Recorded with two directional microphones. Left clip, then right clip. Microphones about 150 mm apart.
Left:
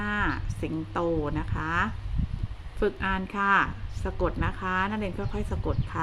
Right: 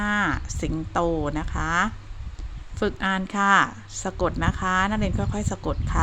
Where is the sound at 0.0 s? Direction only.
55° right (ahead or behind).